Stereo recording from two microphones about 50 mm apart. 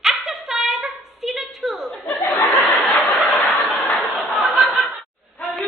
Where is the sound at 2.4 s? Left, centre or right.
Left.